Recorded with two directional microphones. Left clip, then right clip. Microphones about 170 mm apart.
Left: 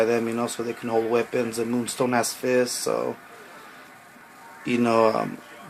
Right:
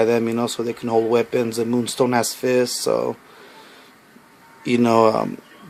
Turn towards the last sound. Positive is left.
turn(degrees=-55)  # may be behind; listen again after turning